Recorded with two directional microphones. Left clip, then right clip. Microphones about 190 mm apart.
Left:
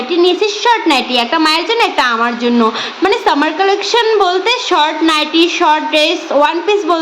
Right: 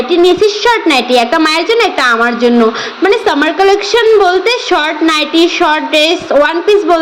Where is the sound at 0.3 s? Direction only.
10° right (ahead or behind).